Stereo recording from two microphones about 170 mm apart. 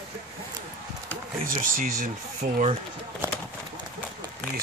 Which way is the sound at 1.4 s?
55° right (ahead or behind).